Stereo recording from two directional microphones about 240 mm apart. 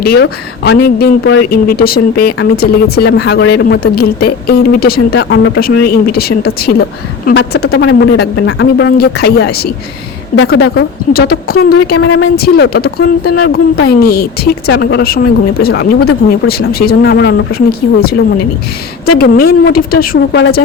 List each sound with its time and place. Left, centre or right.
0.0 s speech: left
11.9 s speech: left
19.2 s speech: left